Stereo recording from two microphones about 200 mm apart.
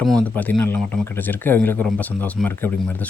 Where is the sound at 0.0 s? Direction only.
5° left (ahead or behind).